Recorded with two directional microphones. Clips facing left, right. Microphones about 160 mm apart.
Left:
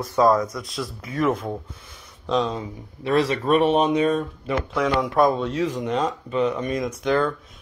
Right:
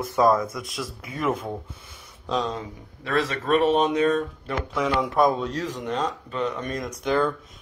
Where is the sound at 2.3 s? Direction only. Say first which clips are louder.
Left 4 dB; centre (ahead or behind).